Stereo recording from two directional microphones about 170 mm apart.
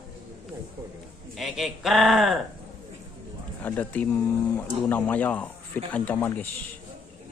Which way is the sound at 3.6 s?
10° left (ahead or behind).